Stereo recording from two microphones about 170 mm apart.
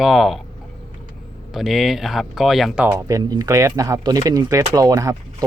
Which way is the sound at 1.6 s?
Centre (ahead or behind).